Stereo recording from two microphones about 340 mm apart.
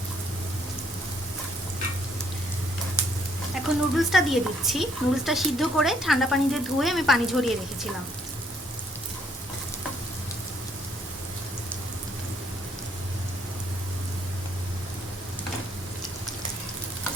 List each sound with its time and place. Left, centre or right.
3.5 s speech: centre